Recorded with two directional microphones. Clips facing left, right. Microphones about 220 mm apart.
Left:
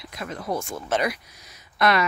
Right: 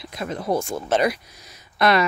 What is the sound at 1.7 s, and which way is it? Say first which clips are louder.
Speech: right 3 dB; 30° right (ahead or behind).